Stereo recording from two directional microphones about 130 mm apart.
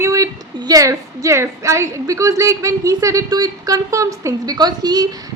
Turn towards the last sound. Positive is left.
turn(degrees=-30)  # may be behind; listen again after turning